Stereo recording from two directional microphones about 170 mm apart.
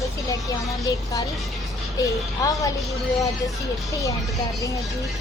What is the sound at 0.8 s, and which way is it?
Speech, 20° left (ahead or behind).